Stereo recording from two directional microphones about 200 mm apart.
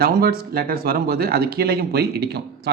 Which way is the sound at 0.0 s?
50° right (ahead or behind).